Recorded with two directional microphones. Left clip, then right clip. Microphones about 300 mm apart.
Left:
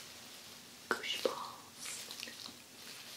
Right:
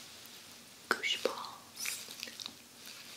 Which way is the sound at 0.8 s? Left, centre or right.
Centre.